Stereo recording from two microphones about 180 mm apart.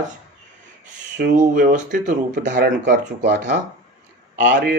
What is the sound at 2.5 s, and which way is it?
Speech, 55° right (ahead or behind).